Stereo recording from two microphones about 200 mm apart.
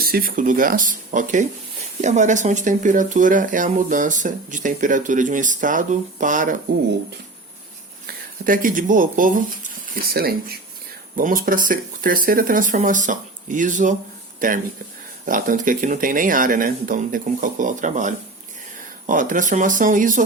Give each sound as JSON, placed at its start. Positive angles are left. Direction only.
{"t": 0.0, "sound": "speech", "side_deg": -45}
{"t": 8.4, "sound": "speech", "side_deg": -45}